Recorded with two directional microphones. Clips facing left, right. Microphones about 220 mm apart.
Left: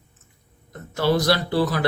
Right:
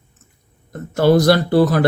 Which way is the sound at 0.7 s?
50° right (ahead or behind).